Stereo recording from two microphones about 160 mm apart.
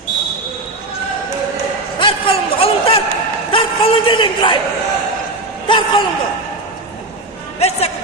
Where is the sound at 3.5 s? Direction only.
35° left (ahead or behind).